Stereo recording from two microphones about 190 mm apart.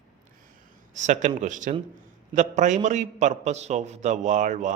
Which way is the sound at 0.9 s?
40° right (ahead or behind).